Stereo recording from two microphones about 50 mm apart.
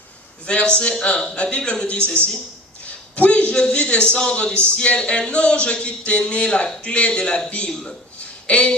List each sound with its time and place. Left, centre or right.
0.5 s a man's voice: left